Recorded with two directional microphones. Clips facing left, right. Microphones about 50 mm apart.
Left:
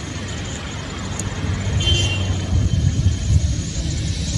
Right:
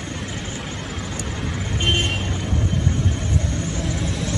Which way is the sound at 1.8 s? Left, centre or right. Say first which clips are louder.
Right 1 dB; centre.